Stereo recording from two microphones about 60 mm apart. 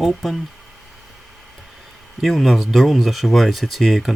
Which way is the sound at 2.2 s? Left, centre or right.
Centre.